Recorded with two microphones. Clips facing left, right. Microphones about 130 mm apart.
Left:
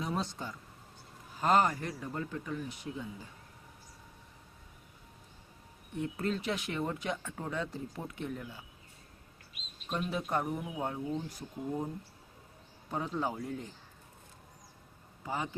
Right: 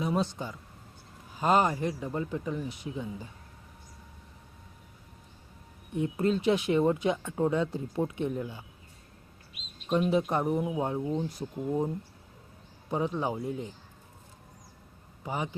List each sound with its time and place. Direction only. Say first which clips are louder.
0.0 s a sound: right 6 dB; 10° right (ahead or behind)
1.4 s speech: right 3 dB; 15° right (ahead or behind)
6.0 s speech: right 7 dB; 20° right (ahead or behind)
10.1 s speech: right 7 dB; 20° right (ahead or behind)
12.9 s speech: right 5 dB; 15° right (ahead or behind)
15.2 s a man's voice: right 3 dB; 15° right (ahead or behind)